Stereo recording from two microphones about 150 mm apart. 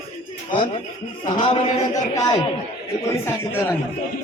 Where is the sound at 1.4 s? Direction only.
35° left (ahead or behind); by 3.7 s 15° left (ahead or behind).